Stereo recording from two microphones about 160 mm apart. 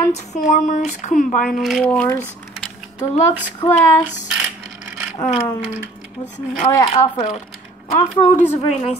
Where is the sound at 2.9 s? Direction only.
45° left (ahead or behind).